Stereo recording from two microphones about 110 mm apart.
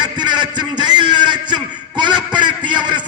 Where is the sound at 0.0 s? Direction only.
40° right (ahead or behind).